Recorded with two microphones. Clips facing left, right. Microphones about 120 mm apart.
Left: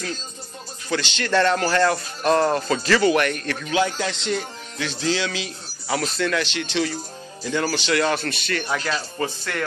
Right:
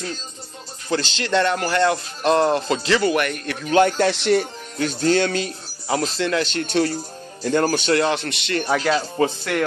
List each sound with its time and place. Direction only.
0.8 s speech: 30° right (ahead or behind)
1.3 s speech: 15° right (ahead or behind)
3.7 s speech: 60° right (ahead or behind)
4.7 s speech: 45° right (ahead or behind)
5.9 s speech: 30° right (ahead or behind); by 7.9 s 50° right (ahead or behind)
7.9 s speech: 20° right (ahead or behind)
9.2 s speech: 15° right (ahead or behind)